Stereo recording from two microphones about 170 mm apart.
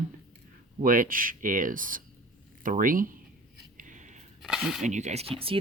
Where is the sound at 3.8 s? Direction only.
50° right (ahead or behind).